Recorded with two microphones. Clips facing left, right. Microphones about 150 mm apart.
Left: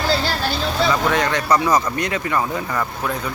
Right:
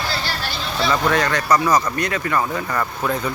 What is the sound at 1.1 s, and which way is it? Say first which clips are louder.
Speech: even; 20° left (ahead or behind).